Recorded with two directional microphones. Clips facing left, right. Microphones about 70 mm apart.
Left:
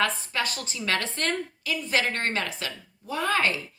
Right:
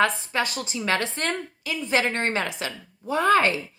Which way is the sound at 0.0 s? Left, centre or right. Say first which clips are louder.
Right 4 dB; right.